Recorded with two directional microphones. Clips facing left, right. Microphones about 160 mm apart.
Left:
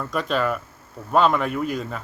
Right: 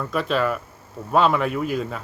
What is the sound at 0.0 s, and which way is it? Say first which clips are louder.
Speech: right 1 dB; centre (ahead or behind).